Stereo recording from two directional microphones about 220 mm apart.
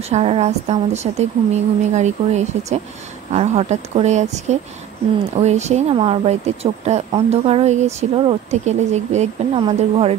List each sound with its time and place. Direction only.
0.1 s a woman's voice: 30° right (ahead or behind)